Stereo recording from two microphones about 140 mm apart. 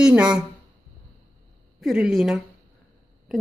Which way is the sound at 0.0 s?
5° right (ahead or behind).